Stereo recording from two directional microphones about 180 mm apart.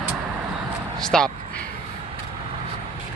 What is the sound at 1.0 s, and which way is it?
Speech, 5° left (ahead or behind).